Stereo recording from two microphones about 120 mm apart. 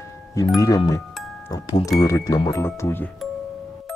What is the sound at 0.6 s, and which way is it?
Speech, 30° left (ahead or behind).